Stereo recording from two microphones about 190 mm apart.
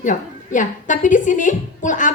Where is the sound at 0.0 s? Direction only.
40° left (ahead or behind).